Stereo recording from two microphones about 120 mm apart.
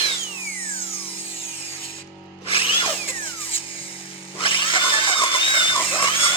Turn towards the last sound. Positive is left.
turn(degrees=45)  # may be behind; listen again after turning